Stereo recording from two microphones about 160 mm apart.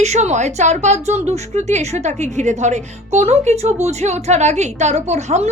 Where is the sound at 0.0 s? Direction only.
45° right (ahead or behind).